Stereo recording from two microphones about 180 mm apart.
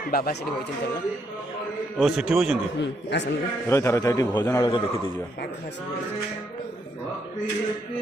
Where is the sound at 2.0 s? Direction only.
5° right (ahead or behind).